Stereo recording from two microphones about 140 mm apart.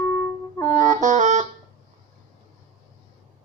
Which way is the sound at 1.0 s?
65° right (ahead or behind).